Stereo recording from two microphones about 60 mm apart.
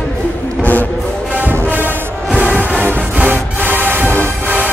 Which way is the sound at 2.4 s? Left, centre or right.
Right.